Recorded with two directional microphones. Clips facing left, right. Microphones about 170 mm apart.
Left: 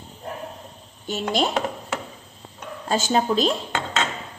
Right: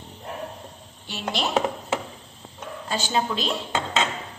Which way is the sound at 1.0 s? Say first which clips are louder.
Left 5 dB; 45° left (ahead or behind).